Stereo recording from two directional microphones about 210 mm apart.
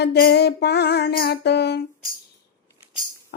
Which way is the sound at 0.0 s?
50° left (ahead or behind).